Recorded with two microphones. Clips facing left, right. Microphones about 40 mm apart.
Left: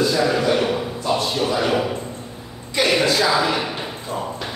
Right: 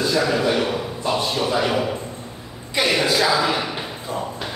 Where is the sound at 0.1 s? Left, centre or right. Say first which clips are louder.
Left 1 dB; centre.